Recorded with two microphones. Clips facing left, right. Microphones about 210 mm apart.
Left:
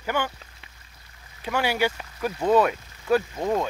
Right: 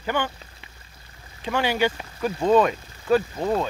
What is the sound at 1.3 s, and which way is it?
Speech, 10° left (ahead or behind).